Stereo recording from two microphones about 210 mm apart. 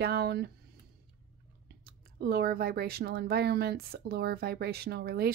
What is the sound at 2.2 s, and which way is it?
Speech, 50° right (ahead or behind).